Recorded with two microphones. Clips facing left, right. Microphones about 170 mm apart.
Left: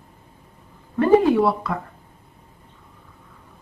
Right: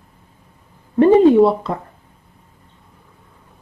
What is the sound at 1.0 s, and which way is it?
Speech, 25° right (ahead or behind).